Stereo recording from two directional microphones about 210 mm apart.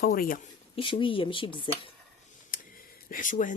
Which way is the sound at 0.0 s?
45° left (ahead or behind).